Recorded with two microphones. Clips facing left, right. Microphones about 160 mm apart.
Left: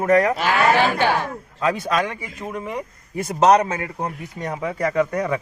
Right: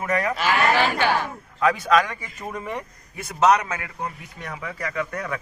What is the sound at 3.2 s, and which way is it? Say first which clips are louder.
Speech: left 4 dB; 35° left (ahead or behind).